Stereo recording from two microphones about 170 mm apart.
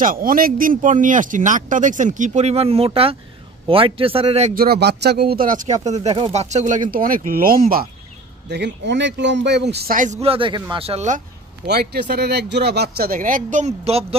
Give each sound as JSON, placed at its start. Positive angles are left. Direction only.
{"t": 0.0, "sound": "speech", "side_deg": -55}
{"t": 4.6, "sound": "speech", "side_deg": -70}
{"t": 8.5, "sound": "speech", "side_deg": -85}
{"t": 11.6, "sound": "speech", "side_deg": -70}